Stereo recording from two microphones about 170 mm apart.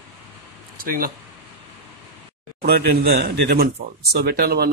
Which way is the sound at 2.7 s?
70° right (ahead or behind).